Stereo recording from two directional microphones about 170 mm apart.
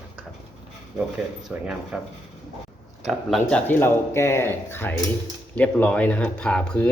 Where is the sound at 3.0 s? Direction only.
Centre (ahead or behind).